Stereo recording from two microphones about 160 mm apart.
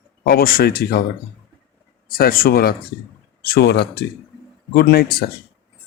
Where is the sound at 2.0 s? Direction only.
65° left (ahead or behind); by 4.0 s 90° left.